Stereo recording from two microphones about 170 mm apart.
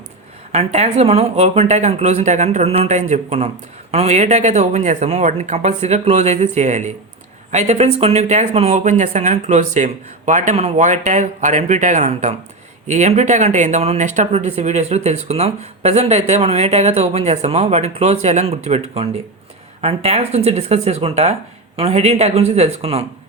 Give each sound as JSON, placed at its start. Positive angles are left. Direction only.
{"t": 0.5, "sound": "speech", "side_deg": -40}